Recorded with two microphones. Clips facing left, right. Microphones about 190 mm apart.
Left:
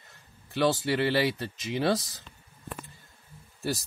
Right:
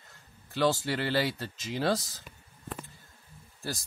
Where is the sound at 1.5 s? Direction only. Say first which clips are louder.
Left 4 dB; 65° left (ahead or behind).